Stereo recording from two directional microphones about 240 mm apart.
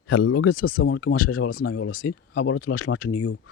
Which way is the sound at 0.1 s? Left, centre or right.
Left.